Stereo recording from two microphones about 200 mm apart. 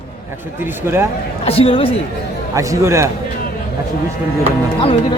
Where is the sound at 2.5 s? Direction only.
15° right (ahead or behind).